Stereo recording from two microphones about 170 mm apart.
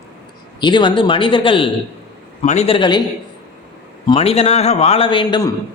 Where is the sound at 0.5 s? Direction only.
25° left (ahead or behind).